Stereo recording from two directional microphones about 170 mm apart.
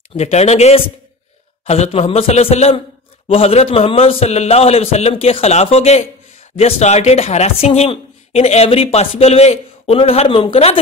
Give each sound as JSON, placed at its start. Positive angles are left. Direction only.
{"t": 0.2, "sound": "speech", "side_deg": 40}